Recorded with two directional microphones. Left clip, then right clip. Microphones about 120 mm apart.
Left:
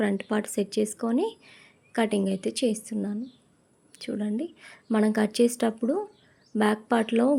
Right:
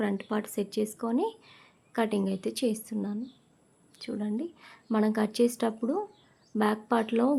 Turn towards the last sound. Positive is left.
turn(degrees=20)  # may be behind; listen again after turning